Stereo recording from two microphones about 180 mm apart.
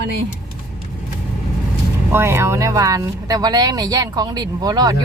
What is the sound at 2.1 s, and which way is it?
Speech, 15° right (ahead or behind).